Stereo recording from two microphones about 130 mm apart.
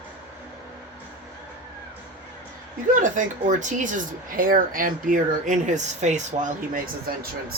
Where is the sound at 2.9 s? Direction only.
75° right (ahead or behind).